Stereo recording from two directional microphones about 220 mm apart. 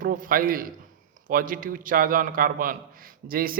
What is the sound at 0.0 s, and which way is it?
A man's voice, 40° right (ahead or behind).